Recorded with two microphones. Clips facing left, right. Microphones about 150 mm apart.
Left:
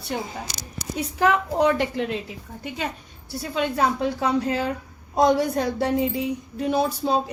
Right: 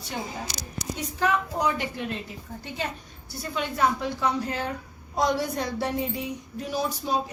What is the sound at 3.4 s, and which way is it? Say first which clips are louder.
A woman's voice: left 3 dB; 70° left (ahead or behind).